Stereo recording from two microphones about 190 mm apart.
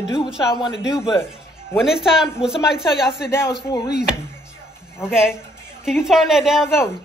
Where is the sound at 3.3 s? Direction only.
15° left (ahead or behind).